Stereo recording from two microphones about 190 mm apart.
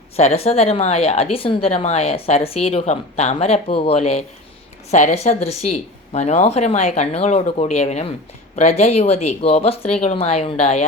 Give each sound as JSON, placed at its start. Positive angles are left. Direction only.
{"t": 0.2, "sound": "a woman's voice", "side_deg": 35}